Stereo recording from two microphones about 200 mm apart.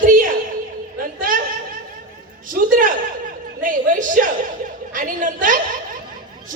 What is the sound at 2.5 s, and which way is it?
A man's voice, 40° right (ahead or behind).